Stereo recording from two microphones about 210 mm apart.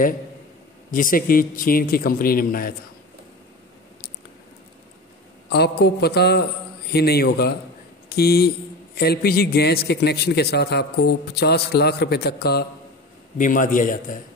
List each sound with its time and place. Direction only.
0.9 s a man's voice: 40° left (ahead or behind)
5.5 s a man's voice: 50° left (ahead or behind)
13.4 s a man's voice: 40° left (ahead or behind)